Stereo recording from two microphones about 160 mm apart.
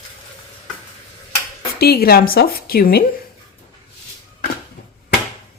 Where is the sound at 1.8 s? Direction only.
75° left (ahead or behind).